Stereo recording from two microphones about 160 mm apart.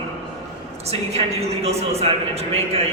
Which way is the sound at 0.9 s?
40° right (ahead or behind).